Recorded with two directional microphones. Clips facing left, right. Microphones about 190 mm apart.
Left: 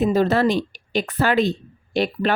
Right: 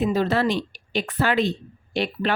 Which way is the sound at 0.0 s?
45° left (ahead or behind).